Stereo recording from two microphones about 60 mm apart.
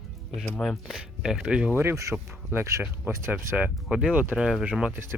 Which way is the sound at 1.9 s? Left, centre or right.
Right.